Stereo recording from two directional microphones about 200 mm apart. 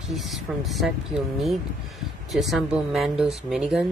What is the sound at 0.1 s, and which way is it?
Speech, centre (ahead or behind).